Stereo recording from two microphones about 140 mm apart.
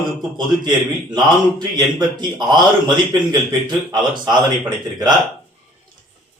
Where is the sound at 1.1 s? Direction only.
30° right (ahead or behind).